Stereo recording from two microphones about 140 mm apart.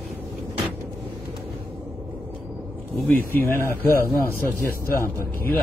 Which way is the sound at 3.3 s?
15° left (ahead or behind).